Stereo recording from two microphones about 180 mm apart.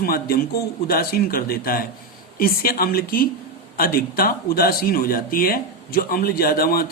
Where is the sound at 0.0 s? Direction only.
55° left (ahead or behind).